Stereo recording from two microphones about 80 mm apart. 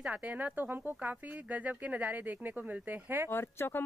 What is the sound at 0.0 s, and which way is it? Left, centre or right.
Speech, centre.